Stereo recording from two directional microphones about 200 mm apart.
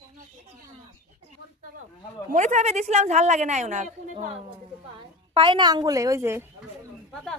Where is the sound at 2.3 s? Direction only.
35° right (ahead or behind).